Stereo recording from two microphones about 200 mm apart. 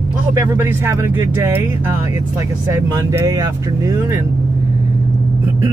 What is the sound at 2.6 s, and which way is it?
Speech, 15° right (ahead or behind).